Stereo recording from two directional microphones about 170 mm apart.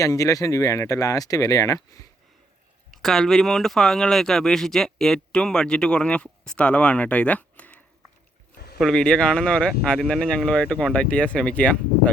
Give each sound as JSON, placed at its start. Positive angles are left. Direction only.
{"t": 0.0, "sound": "speech", "side_deg": 20}
{"t": 2.9, "sound": "speech", "side_deg": 0}
{"t": 8.5, "sound": "boat", "side_deg": 70}
{"t": 8.8, "sound": "speech", "side_deg": 5}